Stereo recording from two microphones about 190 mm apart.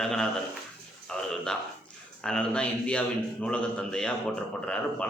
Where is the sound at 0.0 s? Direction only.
Centre (ahead or behind).